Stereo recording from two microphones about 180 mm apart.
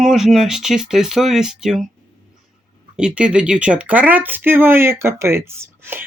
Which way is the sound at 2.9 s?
5° right (ahead or behind).